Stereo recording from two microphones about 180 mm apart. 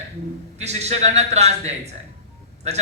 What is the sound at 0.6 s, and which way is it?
A man's voice, 35° right (ahead or behind).